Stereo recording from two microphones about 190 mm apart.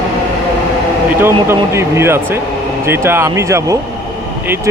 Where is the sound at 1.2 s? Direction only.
15° right (ahead or behind).